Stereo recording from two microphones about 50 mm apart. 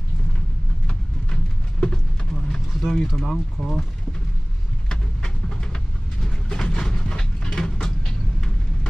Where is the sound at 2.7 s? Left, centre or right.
Centre.